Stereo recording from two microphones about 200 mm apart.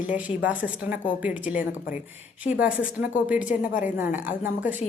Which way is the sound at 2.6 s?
5° right (ahead or behind).